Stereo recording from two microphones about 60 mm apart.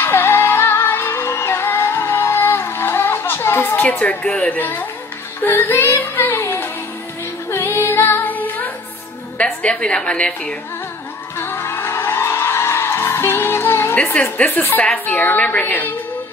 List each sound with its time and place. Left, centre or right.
0.0 s music: left
4.0 s a woman's voice: centre
4.6 s music: left
9.4 s a woman's voice: left
11.3 s music: left
14.1 s a woman's voice: left
14.5 s a woman's voice: left
14.8 s a woman's voice: left